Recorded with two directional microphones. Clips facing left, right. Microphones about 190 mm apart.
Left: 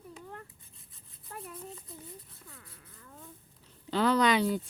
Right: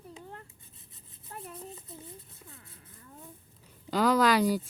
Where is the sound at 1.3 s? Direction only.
25° right (ahead or behind).